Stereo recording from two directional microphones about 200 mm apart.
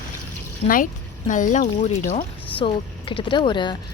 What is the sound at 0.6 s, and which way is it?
Speech, 40° left (ahead or behind).